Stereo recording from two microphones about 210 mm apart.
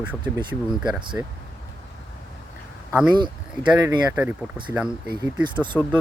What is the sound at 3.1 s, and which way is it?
Speech, 20° right (ahead or behind).